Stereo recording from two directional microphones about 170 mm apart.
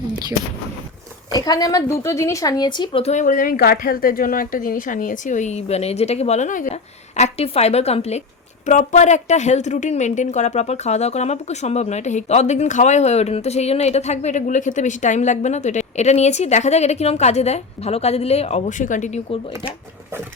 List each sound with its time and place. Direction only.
1.3 s a woman's voice: 20° left (ahead or behind); by 6.7 s 45° left (ahead or behind)
7.2 s a woman's voice: 35° left (ahead or behind)